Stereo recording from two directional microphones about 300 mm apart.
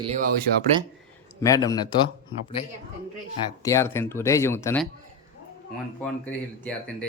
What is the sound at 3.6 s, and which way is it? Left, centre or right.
Speech, centre.